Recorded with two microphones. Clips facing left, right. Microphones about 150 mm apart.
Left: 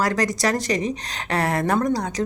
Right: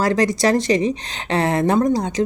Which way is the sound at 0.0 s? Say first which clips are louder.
Right 4 dB; 25° right (ahead or behind).